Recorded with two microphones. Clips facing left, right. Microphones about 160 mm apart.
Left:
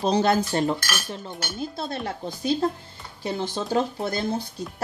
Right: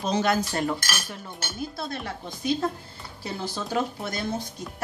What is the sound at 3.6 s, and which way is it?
Cutlery, 30° left (ahead or behind).